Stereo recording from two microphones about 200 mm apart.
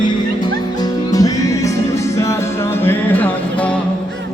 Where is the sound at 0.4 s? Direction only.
20° left (ahead or behind).